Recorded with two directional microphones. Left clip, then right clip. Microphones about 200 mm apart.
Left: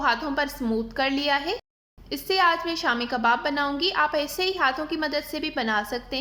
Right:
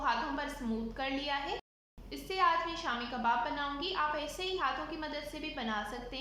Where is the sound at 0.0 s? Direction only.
45° left (ahead or behind).